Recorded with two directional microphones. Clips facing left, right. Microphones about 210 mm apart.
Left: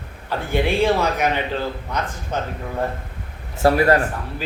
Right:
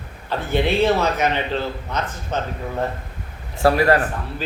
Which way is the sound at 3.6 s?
25° left (ahead or behind).